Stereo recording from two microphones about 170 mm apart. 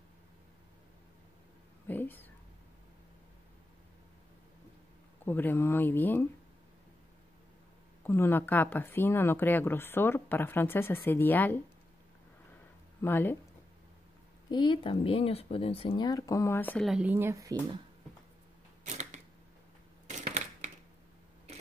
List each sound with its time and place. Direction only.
1.9 s speech: 10° left (ahead or behind)
5.2 s a woman's voice: 10° left (ahead or behind)
8.0 s a woman's voice: 10° left (ahead or behind)
13.0 s a woman's voice: 10° left (ahead or behind)
14.5 s speech: 30° left (ahead or behind); by 16.8 s 10° left (ahead or behind)
16.8 s speech: 5° right (ahead or behind)
18.9 s camera: 45° right (ahead or behind)
20.1 s typewriter: 40° right (ahead or behind)